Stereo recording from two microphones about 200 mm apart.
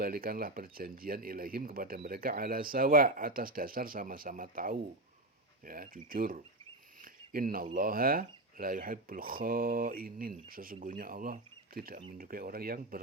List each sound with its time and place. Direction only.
0.0 s speech: 45° right (ahead or behind)